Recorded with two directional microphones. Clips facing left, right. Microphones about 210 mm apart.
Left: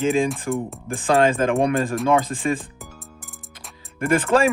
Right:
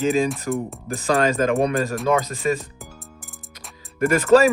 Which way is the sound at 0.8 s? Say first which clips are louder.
Left 2 dB; 40° right (ahead or behind).